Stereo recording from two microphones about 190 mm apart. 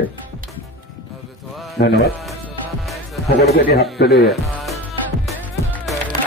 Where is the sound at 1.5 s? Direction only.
Centre (ahead or behind).